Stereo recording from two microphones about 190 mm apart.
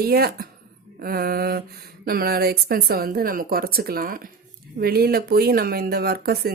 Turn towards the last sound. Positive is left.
turn(degrees=-55)  # may be behind; listen again after turning